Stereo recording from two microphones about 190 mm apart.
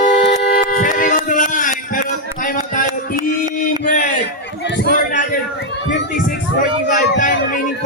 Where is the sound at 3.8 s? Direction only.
45° left (ahead or behind).